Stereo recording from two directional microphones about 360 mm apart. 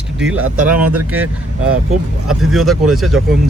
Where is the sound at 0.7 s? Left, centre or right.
Right.